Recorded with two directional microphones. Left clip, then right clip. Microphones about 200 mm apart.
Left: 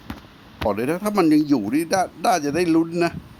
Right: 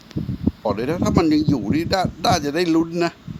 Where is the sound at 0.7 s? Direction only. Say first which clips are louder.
Even; 10° left (ahead or behind).